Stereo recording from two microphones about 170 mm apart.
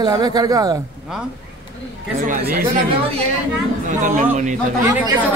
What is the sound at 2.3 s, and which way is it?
Speech, 55° right (ahead or behind).